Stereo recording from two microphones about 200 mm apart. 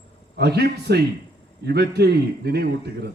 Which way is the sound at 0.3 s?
55° right (ahead or behind).